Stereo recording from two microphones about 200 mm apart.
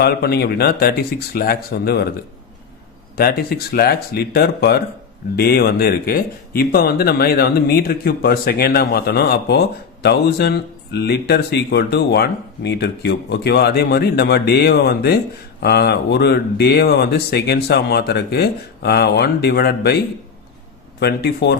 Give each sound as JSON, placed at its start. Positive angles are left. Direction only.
{"t": 0.0, "sound": "speech", "side_deg": 50}
{"t": 3.2, "sound": "speech", "side_deg": 50}
{"t": 21.0, "sound": "speech", "side_deg": 55}